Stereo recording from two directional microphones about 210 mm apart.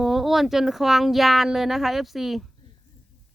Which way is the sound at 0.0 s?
Centre (ahead or behind).